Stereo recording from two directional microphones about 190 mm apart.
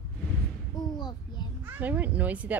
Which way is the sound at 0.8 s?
20° left (ahead or behind).